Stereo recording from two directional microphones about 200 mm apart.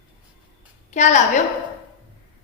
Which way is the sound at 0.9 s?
35° left (ahead or behind).